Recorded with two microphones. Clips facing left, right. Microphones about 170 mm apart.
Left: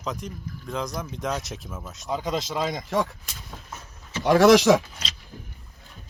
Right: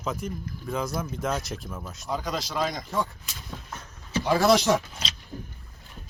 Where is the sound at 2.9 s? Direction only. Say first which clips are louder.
Left 4 dB; 90° left.